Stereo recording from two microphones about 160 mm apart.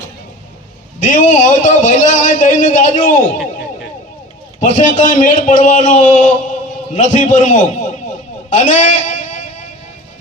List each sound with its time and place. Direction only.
0.9 s a man's voice: 50° left (ahead or behind)
4.6 s a man's voice: 50° left (ahead or behind)
8.4 s a sound: 50° left (ahead or behind)